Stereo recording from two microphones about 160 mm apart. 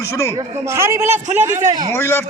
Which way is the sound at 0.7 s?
15° right (ahead or behind).